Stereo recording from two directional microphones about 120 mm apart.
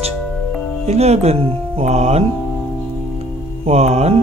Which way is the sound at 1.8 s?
70° right (ahead or behind).